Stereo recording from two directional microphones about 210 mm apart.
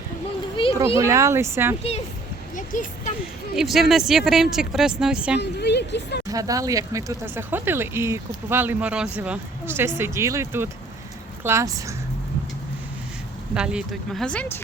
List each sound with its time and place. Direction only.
0.9 s speech: 15° right (ahead or behind)
2.6 s a sound: 40° left (ahead or behind)
3.5 s speech: centre (ahead or behind)
5.4 s a sound: 55° left (ahead or behind)
6.2 s speech: 15° right (ahead or behind)
13.5 s speech: 5° right (ahead or behind)